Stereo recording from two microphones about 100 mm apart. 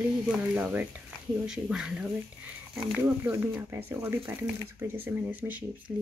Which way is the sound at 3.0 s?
25° right (ahead or behind).